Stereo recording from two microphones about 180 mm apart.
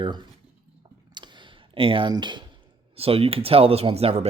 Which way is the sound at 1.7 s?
30° right (ahead or behind).